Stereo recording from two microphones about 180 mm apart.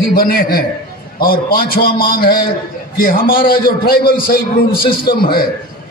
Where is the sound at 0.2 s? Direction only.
55° left (ahead or behind).